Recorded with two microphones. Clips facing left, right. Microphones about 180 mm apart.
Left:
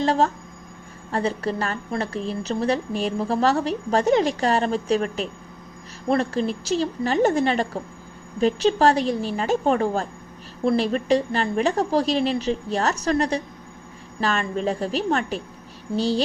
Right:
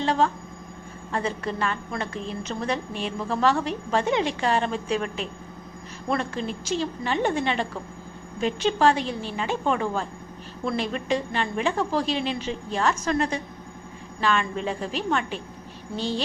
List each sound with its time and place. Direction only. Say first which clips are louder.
0.0 s a woman's voice: left 2 dB; 40° left (ahead or behind)